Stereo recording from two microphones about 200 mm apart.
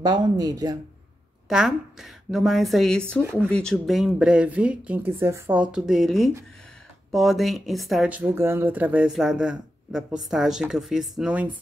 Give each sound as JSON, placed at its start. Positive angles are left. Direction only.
{"t": 0.0, "sound": "speech", "side_deg": -20}
{"t": 1.5, "sound": "speech", "side_deg": 0}